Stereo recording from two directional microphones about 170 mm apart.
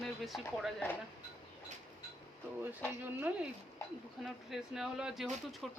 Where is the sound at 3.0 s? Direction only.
10° right (ahead or behind).